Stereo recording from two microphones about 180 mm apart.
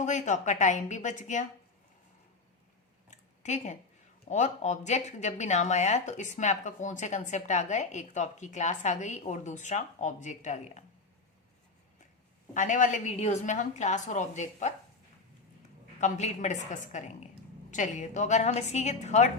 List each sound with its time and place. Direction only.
0.0 s speech: 40° left (ahead or behind)
3.4 s speech: 40° left (ahead or behind)
12.5 s speech: 45° left (ahead or behind)
16.0 s speech: 40° left (ahead or behind)